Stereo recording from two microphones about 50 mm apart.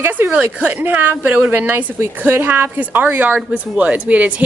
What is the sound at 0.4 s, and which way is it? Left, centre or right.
A woman's voice, right.